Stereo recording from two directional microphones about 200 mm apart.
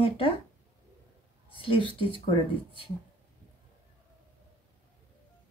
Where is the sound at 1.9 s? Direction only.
25° left (ahead or behind).